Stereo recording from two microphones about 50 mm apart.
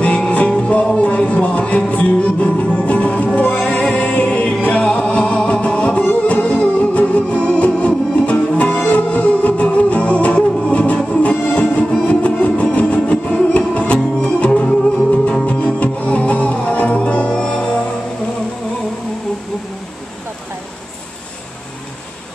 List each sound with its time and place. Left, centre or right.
0.3 s music: left
12.1 s music: left